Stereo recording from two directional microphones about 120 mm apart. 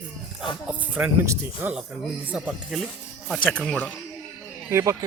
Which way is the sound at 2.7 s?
Centre (ahead or behind).